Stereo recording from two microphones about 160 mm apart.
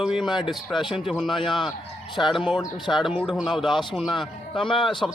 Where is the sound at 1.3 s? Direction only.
30° left (ahead or behind).